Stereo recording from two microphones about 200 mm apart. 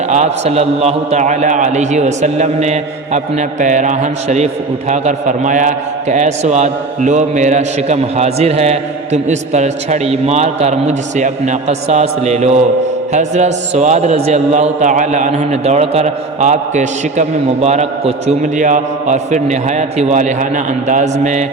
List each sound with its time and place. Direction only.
0.1 s a man's voice: 35° right (ahead or behind)